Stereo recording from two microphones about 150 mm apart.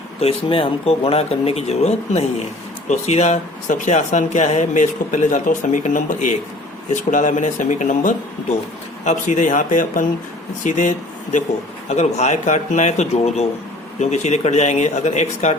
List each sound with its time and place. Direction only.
0.2 s speech: 40° left (ahead or behind)